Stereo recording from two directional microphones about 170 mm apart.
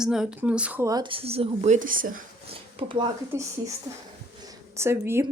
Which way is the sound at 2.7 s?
30° right (ahead or behind).